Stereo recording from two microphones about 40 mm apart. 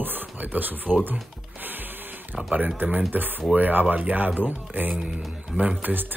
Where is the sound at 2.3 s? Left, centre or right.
Centre.